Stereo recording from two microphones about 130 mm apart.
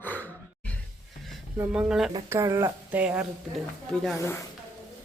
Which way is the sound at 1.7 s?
5° right (ahead or behind).